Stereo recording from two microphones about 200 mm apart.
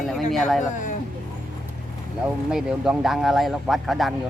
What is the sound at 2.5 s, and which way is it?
Speech, centre (ahead or behind).